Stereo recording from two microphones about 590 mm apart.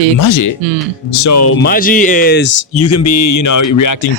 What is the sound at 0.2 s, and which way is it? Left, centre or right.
Speech, left.